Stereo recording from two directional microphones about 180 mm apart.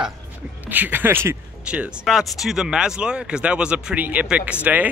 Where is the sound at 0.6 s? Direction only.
10° right (ahead or behind).